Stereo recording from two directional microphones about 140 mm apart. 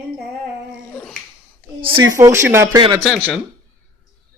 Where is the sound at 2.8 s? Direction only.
30° right (ahead or behind).